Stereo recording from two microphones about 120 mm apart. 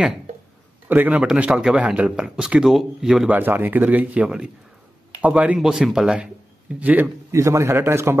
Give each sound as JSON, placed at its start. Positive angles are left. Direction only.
{"t": 0.8, "sound": "speech", "side_deg": -15}
{"t": 3.3, "sound": "a man's voice", "side_deg": -15}
{"t": 7.2, "sound": "a man's voice", "side_deg": -25}